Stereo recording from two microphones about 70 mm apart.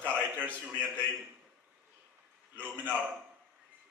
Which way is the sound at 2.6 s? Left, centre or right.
Right.